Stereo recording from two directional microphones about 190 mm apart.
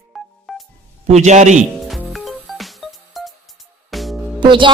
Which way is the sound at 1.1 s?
35° right (ahead or behind).